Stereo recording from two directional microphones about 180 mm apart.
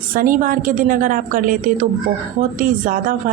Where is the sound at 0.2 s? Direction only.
50° right (ahead or behind).